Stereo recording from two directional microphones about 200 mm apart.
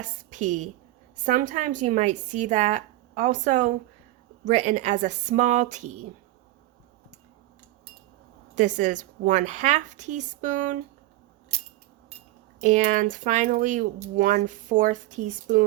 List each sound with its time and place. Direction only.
0.0 s a woman's voice: 40° right (ahead or behind)
8.5 s speech: 35° right (ahead or behind)
12.6 s speech: 35° right (ahead or behind)